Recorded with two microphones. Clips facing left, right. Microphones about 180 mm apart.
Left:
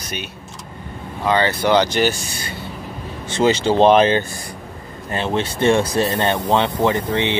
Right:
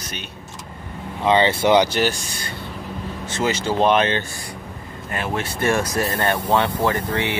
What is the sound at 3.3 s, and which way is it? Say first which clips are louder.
Speech: left 6 dB; 30° left (ahead or behind).